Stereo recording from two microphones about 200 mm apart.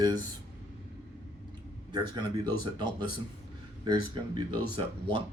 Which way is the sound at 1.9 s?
20° right (ahead or behind).